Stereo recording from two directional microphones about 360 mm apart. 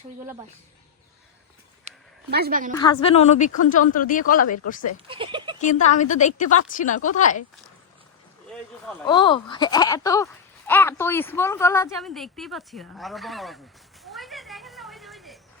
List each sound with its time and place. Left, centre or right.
2.3 s a woman's voice: right
2.7 s a woman's voice: centre
5.0 s a sound: centre
5.6 s a woman's voice: centre
9.0 s a woman's voice: centre
14.0 s cat: centre